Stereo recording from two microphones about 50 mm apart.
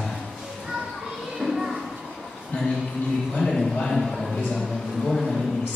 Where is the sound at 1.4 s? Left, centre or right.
Centre.